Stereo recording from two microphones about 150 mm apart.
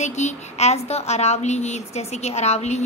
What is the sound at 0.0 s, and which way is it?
A woman's voice, 50° left (ahead or behind).